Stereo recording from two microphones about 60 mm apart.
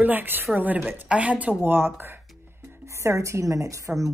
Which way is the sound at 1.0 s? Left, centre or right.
Right.